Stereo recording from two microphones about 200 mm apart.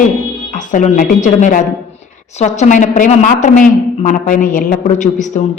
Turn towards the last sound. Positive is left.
turn(degrees=40)  # may be behind; listen again after turning